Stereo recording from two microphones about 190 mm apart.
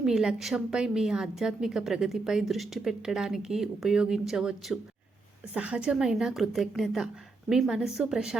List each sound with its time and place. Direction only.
0.0 s a woman's voice: centre (ahead or behind)